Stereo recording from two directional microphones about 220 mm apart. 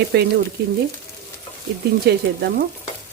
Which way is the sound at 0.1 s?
45° right (ahead or behind).